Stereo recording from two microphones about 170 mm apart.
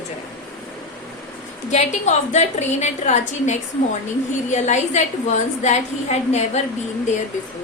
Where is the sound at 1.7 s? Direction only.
40° left (ahead or behind).